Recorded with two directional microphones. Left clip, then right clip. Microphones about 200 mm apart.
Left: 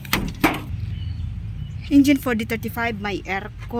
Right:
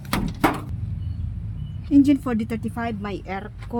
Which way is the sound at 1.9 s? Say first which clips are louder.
Left 1 dB; centre (ahead or behind).